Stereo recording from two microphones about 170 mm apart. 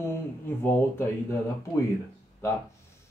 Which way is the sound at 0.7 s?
15° left (ahead or behind).